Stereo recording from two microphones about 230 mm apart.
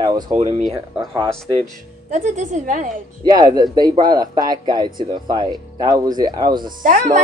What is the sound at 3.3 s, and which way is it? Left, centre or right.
Speech, centre.